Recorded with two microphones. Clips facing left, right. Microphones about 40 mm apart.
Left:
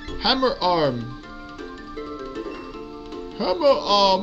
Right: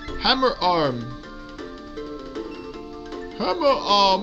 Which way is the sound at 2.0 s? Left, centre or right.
Left.